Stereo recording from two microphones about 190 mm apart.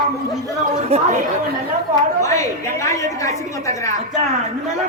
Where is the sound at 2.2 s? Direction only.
15° left (ahead or behind).